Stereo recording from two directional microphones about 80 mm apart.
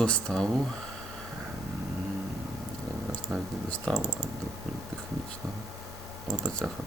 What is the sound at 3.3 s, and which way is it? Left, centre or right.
Speech, right.